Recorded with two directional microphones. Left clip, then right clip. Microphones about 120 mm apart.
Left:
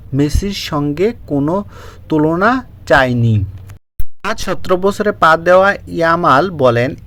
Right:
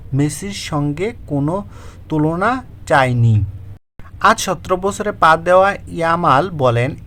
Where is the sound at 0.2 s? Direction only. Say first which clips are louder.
Left 4 dB; 20° left (ahead or behind).